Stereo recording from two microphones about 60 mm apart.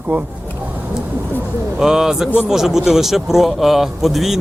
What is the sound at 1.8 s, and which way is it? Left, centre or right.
Speech, centre.